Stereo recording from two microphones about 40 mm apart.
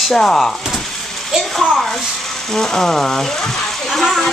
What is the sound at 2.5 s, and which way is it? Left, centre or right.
Speech, centre.